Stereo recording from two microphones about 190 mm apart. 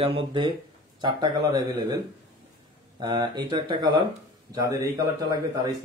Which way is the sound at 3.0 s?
25° right (ahead or behind).